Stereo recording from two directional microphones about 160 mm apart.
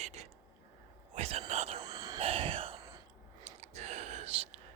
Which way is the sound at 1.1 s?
40° right (ahead or behind).